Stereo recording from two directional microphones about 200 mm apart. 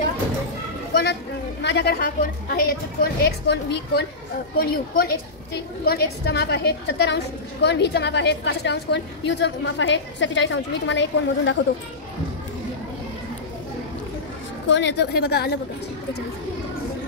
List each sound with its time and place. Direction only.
1.6 s a woman's voice: 60° left (ahead or behind)
14.7 s a woman's voice: 60° left (ahead or behind)